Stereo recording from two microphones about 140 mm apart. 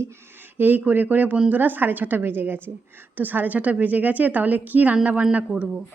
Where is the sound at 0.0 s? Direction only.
15° right (ahead or behind).